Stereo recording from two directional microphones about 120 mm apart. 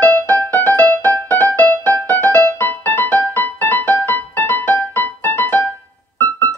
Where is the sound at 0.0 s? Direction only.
15° left (ahead or behind).